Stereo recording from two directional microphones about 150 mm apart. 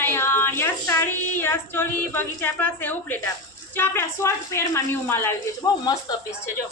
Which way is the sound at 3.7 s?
15° left (ahead or behind).